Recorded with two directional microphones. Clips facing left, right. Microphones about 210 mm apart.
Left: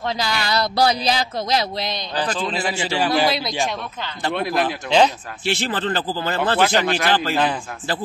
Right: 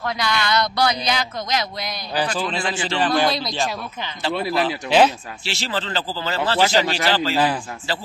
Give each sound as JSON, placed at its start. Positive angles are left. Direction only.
{"t": 0.0, "sound": "speech", "side_deg": 30}
{"t": 2.5, "sound": "a man's voice", "side_deg": 10}
{"t": 4.8, "sound": "speech", "side_deg": -5}
{"t": 5.4, "sound": "speech", "side_deg": 55}